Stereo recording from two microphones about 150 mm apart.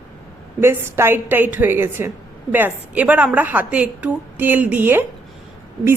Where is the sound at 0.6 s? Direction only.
15° right (ahead or behind).